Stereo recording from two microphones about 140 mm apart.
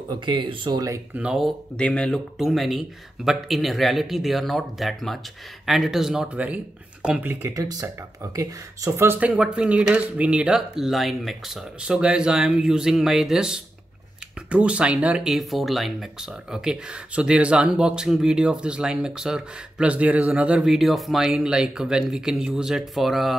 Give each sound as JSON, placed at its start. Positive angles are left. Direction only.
{"t": 0.1, "sound": "speech", "side_deg": -35}
{"t": 1.1, "sound": "speech", "side_deg": -5}
{"t": 1.8, "sound": "speech", "side_deg": 5}